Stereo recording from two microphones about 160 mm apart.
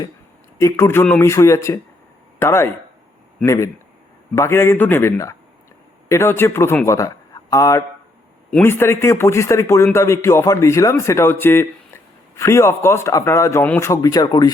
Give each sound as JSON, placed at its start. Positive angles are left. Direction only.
{"t": 0.6, "sound": "a man's voice", "side_deg": 15}